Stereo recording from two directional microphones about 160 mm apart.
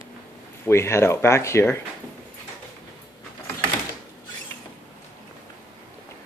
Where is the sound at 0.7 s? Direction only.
15° left (ahead or behind).